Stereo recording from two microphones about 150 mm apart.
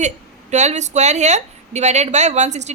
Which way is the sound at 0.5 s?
50° right (ahead or behind).